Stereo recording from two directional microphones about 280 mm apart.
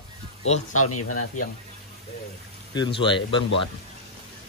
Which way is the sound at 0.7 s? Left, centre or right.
Left.